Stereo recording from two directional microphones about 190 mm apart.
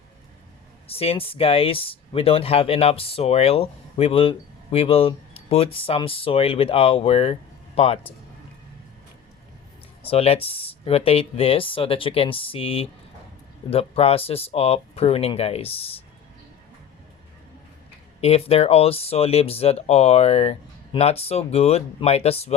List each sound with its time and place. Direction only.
0.9 s speech: 30° left (ahead or behind)
10.0 s speech: 30° left (ahead or behind)
18.2 s speech: 30° left (ahead or behind)